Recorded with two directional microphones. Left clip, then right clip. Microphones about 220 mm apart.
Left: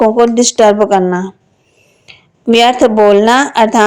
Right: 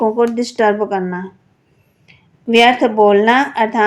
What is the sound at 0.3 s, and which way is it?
Speech, 40° left (ahead or behind).